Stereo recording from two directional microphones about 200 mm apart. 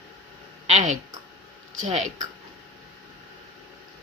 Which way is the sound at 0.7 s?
35° right (ahead or behind).